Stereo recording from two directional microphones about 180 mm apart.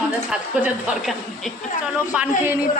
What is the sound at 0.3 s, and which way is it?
A woman's voice, 5° right (ahead or behind).